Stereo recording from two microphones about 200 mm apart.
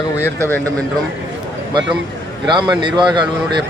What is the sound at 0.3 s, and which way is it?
Speech, 10° left (ahead or behind).